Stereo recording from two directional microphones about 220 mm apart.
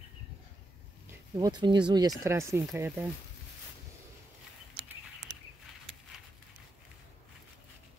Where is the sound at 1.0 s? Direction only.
15° right (ahead or behind).